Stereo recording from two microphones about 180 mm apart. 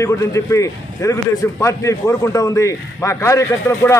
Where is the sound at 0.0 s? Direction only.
15° left (ahead or behind).